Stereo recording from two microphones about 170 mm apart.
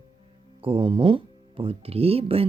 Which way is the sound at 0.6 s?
30° right (ahead or behind).